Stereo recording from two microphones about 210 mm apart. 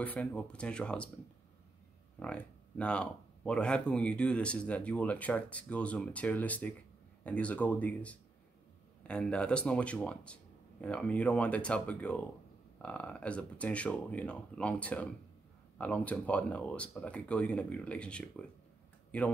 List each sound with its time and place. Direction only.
0.0 s speech: 5° left (ahead or behind)
2.1 s speech: 5° left (ahead or behind)